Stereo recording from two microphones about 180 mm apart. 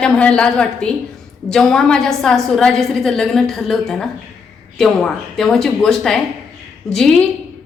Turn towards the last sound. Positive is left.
turn(degrees=0)  # may be behind; listen again after turning